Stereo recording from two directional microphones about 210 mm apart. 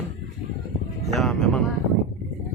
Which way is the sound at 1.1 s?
Centre (ahead or behind).